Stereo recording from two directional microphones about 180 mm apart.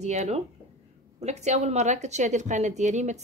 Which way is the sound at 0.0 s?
40° right (ahead or behind).